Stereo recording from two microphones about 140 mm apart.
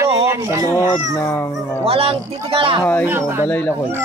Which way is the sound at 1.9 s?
40° right (ahead or behind).